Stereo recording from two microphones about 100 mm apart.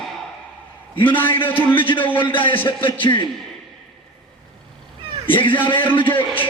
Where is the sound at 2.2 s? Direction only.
60° left (ahead or behind).